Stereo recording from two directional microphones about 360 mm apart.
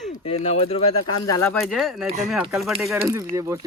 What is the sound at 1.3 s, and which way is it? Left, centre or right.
Speech, centre.